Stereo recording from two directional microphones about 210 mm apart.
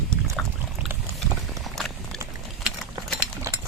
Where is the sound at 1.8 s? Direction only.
Centre (ahead or behind).